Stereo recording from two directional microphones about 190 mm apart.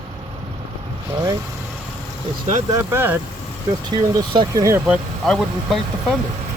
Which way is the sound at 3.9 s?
20° right (ahead or behind).